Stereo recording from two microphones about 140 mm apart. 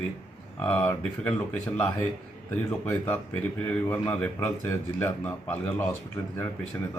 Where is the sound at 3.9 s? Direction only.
10° left (ahead or behind).